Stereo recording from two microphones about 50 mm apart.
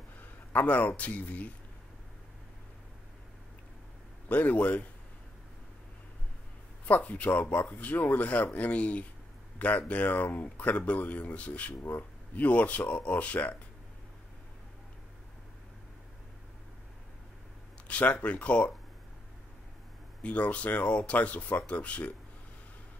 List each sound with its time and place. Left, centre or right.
0.5 s speech: left
4.3 s speech: left
6.9 s speech: left
17.8 s speech: left
20.2 s speech: left